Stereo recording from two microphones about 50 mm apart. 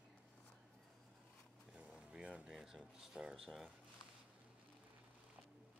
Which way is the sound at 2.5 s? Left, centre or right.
Centre.